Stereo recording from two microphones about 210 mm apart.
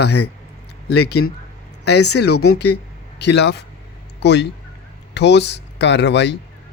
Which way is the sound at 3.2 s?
55° left (ahead or behind).